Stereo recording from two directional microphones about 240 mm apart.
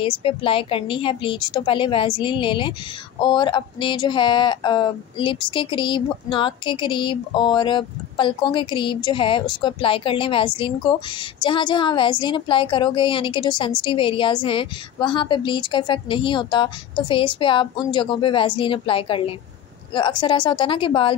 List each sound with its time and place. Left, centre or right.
0.0 s a woman's voice: left